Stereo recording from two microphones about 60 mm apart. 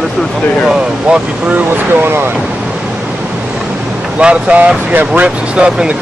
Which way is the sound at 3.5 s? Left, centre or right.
Centre.